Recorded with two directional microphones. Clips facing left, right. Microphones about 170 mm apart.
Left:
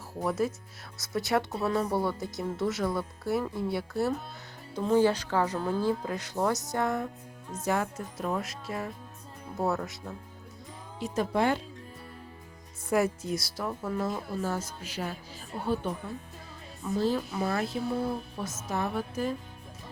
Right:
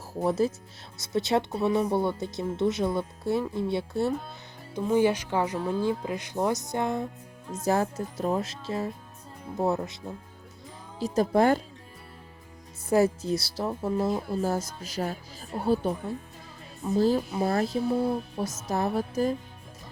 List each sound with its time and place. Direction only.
0.2 s speech: 30° right (ahead or behind)
7.6 s speech: 35° right (ahead or behind)
11.0 s speech: 35° right (ahead or behind)
12.9 s speech: 30° right (ahead or behind)
17.0 s speech: 40° right (ahead or behind)